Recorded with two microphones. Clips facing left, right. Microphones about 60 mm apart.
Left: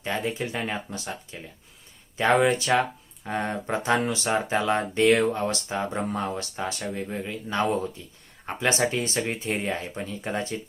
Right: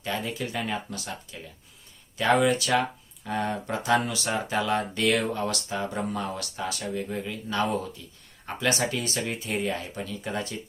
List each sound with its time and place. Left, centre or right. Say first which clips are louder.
0.0 s speech: left 2 dB; left